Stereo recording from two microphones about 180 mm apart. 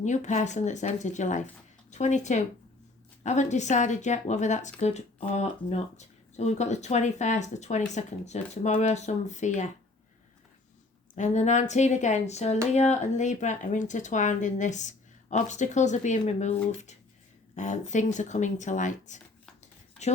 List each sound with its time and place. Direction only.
0.0 s a woman's voice: 40° left (ahead or behind)
11.1 s a woman's voice: 40° left (ahead or behind)